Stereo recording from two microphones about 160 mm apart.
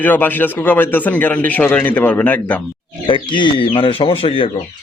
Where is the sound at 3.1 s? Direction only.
30° left (ahead or behind).